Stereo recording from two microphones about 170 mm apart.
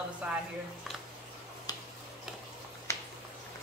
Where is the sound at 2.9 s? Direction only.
15° left (ahead or behind).